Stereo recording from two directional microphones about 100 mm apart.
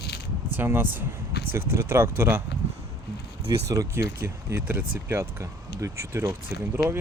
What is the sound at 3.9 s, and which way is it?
Speech, 25° right (ahead or behind).